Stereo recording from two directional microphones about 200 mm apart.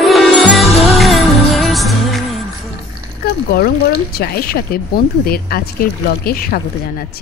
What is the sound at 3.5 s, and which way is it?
Speech, 50° left (ahead or behind).